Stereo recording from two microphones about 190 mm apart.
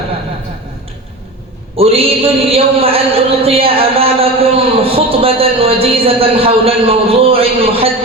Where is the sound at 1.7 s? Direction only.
30° right (ahead or behind).